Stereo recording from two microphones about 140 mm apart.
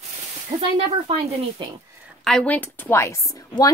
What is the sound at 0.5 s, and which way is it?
Speech, 25° right (ahead or behind).